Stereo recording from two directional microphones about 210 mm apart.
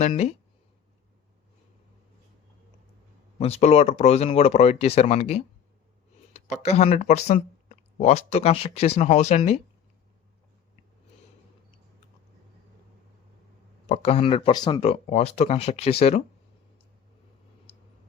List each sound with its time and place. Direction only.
0.0 s speech: 30° left (ahead or behind)
3.3 s speech: 30° left (ahead or behind)
6.6 s speech: 30° left (ahead or behind)
13.8 s speech: 30° left (ahead or behind)